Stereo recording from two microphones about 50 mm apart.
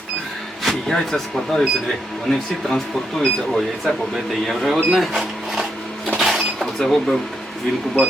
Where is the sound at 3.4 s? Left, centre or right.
Centre.